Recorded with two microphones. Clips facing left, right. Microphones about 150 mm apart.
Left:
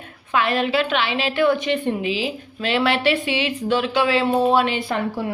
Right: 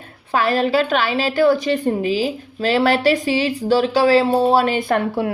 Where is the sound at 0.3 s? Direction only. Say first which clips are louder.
Right 3 dB; 35° right (ahead or behind).